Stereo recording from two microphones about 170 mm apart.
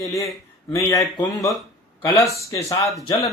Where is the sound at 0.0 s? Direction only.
20° left (ahead or behind).